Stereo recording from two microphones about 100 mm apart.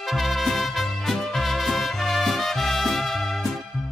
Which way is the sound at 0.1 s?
Centre (ahead or behind).